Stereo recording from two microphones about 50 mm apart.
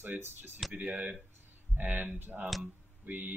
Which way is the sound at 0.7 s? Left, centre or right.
Right.